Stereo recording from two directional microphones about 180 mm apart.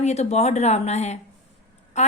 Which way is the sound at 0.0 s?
35° left (ahead or behind).